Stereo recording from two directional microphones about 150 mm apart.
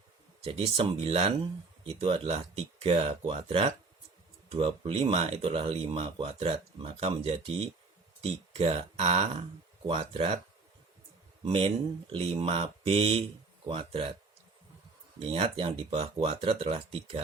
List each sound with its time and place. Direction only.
0.4 s speech: 35° right (ahead or behind)
11.4 s speech: 40° right (ahead or behind)
15.2 s speech: 35° right (ahead or behind)